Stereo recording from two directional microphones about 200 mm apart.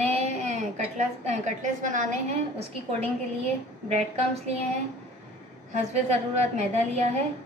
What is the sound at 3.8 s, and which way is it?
Speech, 30° right (ahead or behind).